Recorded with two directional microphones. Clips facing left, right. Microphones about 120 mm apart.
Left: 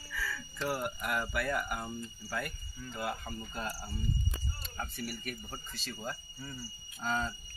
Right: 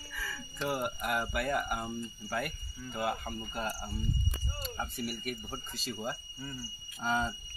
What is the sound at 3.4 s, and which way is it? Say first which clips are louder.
Cricket: right 3 dB; 15° right (ahead or behind).